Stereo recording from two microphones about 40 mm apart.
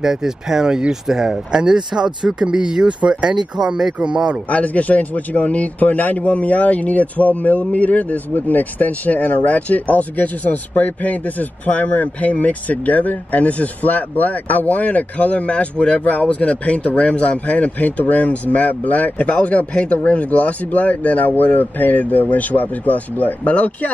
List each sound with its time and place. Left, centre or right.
0.0 s speech: centre; by 4.4 s right
4.5 s speech: left
23.4 s speech: left